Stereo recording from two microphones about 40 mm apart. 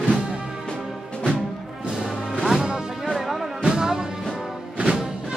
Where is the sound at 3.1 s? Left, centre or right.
Centre.